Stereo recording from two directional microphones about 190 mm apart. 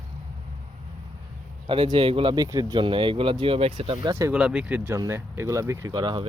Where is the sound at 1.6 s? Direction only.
25° right (ahead or behind).